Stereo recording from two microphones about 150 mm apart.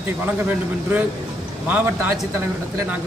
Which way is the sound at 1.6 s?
10° right (ahead or behind).